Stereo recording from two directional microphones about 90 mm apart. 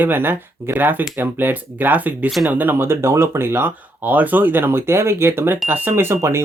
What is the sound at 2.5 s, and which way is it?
Speech, 20° right (ahead or behind).